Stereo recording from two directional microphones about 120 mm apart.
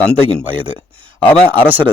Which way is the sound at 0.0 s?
5° left (ahead or behind).